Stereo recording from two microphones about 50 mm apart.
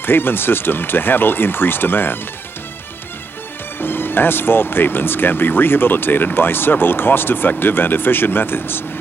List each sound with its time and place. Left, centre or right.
0.0 s speech: left
3.8 s speech: left